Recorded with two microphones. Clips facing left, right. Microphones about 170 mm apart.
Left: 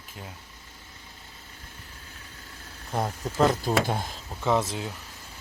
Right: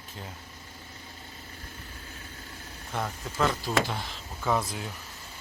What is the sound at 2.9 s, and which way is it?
Speech, 30° left (ahead or behind).